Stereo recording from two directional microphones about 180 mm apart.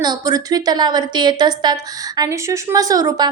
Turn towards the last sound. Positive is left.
turn(degrees=-20)  # may be behind; listen again after turning